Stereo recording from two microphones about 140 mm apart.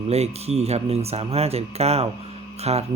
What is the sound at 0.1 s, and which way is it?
A man's voice, 50° right (ahead or behind).